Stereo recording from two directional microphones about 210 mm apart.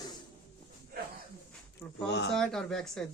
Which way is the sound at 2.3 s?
5° left (ahead or behind).